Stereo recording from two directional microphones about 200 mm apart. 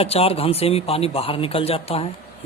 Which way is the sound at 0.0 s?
30° left (ahead or behind).